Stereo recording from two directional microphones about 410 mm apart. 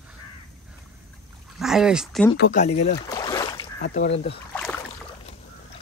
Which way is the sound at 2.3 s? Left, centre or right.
Left.